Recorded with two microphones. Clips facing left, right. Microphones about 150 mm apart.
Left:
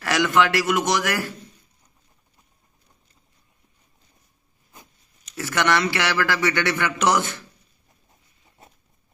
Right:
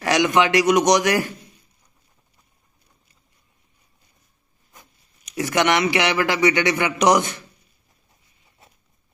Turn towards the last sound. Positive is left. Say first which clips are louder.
# right 4 dB
turn(degrees=-15)  # may be behind; listen again after turning